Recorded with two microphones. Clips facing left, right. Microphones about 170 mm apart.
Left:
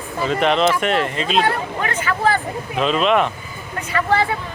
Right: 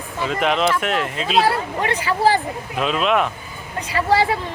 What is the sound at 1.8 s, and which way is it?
Speech, 30° right (ahead or behind).